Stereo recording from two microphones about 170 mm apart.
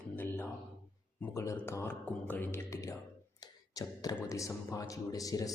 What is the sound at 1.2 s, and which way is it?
Speech, 15° left (ahead or behind).